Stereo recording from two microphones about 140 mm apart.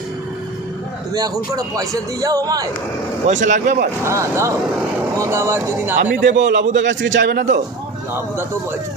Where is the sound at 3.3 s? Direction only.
60° right (ahead or behind).